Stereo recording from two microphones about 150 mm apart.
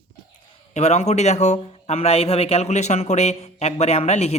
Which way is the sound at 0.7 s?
50° left (ahead or behind).